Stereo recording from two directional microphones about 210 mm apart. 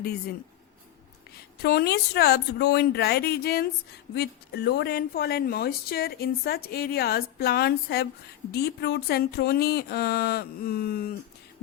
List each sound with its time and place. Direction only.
1.6 s speech: 50° left (ahead or behind)